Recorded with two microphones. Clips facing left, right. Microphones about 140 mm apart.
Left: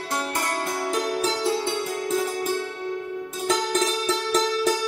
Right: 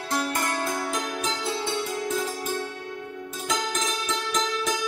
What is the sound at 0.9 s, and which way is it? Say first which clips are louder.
Music: left 5 dB; 35° left (ahead or behind).